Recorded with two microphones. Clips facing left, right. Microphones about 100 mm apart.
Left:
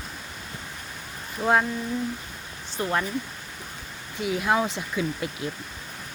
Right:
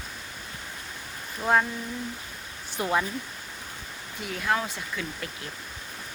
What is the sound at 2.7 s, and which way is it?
Speech, 10° right (ahead or behind).